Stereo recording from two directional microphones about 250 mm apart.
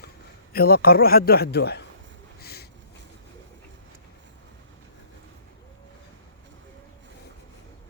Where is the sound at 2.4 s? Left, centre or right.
Left.